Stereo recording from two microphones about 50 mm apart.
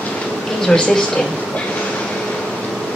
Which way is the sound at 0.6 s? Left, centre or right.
Centre.